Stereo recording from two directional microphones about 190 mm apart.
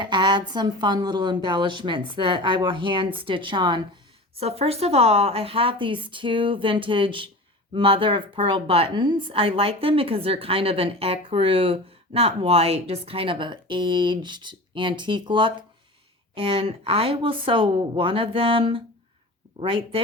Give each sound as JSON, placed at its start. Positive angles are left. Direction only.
{"t": 0.0, "sound": "a woman's voice", "side_deg": -25}